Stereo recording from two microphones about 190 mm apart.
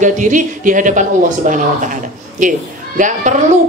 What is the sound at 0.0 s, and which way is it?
A woman's voice, 40° right (ahead or behind).